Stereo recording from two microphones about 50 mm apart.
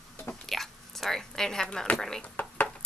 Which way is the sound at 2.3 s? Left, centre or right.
Left.